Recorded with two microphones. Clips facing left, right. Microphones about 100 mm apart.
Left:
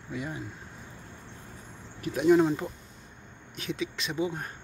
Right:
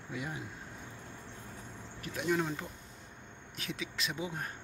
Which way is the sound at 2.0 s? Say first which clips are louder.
Left 11 dB; 20° left (ahead or behind).